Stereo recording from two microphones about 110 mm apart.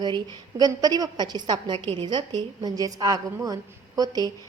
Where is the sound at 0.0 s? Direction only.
40° right (ahead or behind).